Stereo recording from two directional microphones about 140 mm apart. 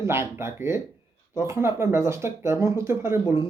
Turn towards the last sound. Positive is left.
turn(degrees=-20)  # may be behind; listen again after turning